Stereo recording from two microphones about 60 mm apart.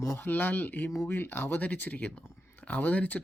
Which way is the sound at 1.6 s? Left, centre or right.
Left.